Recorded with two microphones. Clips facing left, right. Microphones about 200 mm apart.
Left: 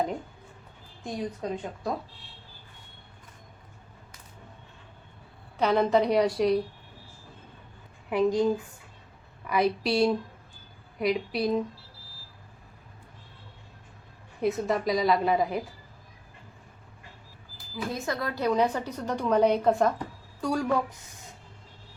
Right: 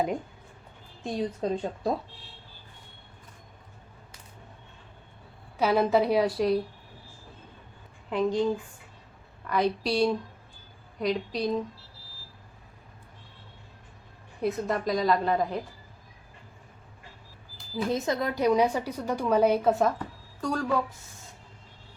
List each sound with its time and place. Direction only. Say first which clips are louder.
1.0 s speech: right 3 dB; 30° right (ahead or behind)
5.5 s a woman's voice: even; 5° right (ahead or behind)
8.1 s a woman's voice: left 2 dB; 10° left (ahead or behind)
14.4 s a woman's voice: left 2 dB; centre (ahead or behind)
17.7 s a woman's voice: right 4 dB; 20° right (ahead or behind); by 19.9 s 5° right (ahead or behind)
20.4 s speech: left 2 dB; 10° left (ahead or behind)